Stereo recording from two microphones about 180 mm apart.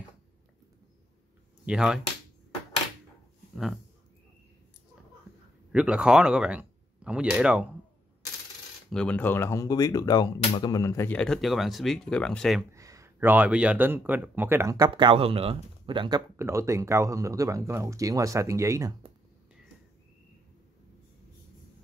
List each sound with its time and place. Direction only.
1.7 s speech: 5° right (ahead or behind)
3.5 s speech: centre (ahead or behind)
5.7 s speech: 5° right (ahead or behind)
8.9 s speech: 5° left (ahead or behind)
12.7 s a man's voice: 15° right (ahead or behind)
16.3 s a man's voice: 15° right (ahead or behind)